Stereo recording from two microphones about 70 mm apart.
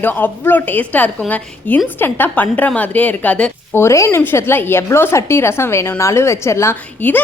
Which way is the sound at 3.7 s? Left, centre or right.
Left.